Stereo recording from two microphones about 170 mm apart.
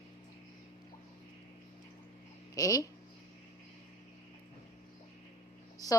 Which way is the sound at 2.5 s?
20° left (ahead or behind).